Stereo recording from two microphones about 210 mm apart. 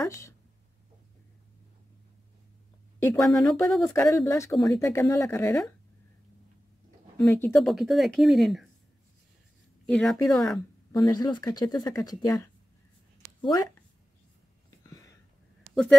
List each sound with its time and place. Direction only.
0.0 s speech: 15° left (ahead or behind)
3.0 s speech: 15° left (ahead or behind)
7.2 s speech: 10° left (ahead or behind)
7.7 s speech: centre (ahead or behind)
9.8 s a woman's voice: 5° left (ahead or behind)
10.9 s speech: 15° left (ahead or behind)
14.8 s whispering: 15° left (ahead or behind)
15.6 s a sound: centre (ahead or behind)